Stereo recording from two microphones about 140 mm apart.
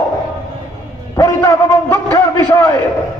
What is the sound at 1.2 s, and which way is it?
Speech, 20° left (ahead or behind).